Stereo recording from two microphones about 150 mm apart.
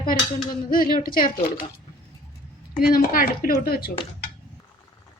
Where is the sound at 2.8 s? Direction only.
75° left (ahead or behind).